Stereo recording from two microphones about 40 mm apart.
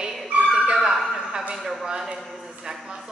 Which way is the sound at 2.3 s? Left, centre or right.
Centre.